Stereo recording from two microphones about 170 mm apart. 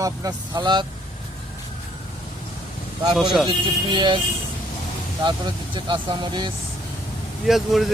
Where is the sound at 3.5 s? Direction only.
30° right (ahead or behind).